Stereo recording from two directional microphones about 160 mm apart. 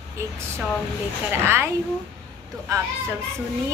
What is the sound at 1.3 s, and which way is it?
Speech, 15° right (ahead or behind).